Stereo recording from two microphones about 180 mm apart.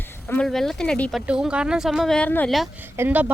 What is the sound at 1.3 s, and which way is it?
Speech, 5° right (ahead or behind).